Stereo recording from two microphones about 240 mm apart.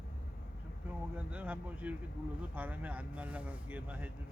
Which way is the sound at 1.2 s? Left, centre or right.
Centre.